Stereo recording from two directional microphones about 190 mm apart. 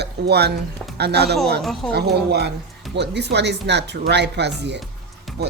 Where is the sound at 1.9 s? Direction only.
60° right (ahead or behind).